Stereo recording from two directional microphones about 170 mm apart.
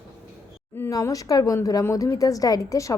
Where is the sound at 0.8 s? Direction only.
20° left (ahead or behind).